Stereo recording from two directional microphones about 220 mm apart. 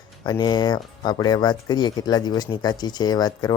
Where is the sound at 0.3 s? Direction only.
20° left (ahead or behind).